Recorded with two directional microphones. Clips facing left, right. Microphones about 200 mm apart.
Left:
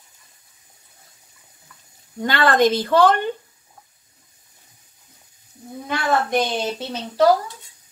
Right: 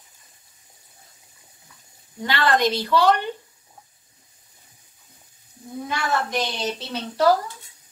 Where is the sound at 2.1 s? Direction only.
50° left (ahead or behind).